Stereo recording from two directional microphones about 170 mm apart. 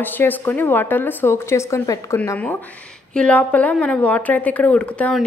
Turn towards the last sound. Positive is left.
turn(degrees=5)  # may be behind; listen again after turning